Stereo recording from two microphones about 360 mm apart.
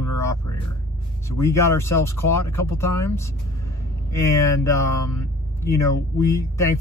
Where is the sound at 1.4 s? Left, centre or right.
Centre.